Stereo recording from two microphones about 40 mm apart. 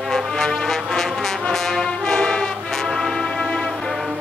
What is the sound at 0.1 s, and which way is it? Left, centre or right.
Music, centre.